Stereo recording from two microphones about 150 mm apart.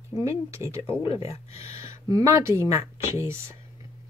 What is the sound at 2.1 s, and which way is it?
Speech, 20° right (ahead or behind).